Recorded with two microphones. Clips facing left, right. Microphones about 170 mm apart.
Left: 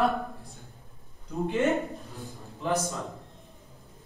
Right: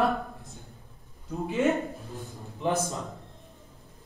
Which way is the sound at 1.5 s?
Centre (ahead or behind).